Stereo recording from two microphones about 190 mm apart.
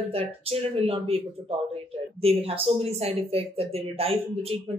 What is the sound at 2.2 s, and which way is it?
Speech, 30° right (ahead or behind).